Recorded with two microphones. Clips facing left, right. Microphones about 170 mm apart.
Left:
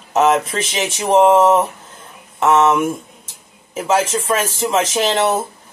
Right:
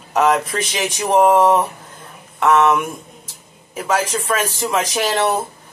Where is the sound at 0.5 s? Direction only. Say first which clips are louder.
Left 1 dB; 25° left (ahead or behind).